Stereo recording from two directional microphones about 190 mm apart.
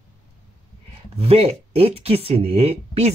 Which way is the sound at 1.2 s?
30° right (ahead or behind).